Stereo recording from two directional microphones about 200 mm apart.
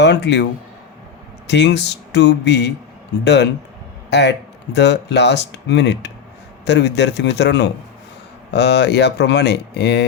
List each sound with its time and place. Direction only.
0.0 s a man's voice: 60° left (ahead or behind)
1.5 s speech: 60° left (ahead or behind)